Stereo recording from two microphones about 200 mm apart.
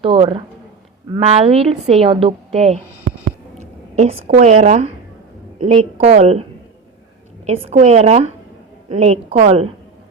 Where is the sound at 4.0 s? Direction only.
35° right (ahead or behind).